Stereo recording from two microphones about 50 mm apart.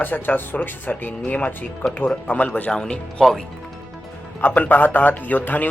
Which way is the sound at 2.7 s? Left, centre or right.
Centre.